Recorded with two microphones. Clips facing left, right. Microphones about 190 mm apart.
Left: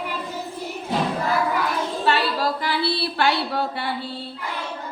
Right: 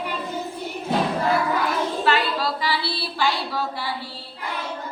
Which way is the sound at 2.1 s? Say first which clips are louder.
Left 4 dB; 45° left (ahead or behind).